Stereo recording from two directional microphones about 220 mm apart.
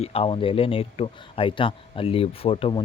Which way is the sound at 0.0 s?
25° left (ahead or behind).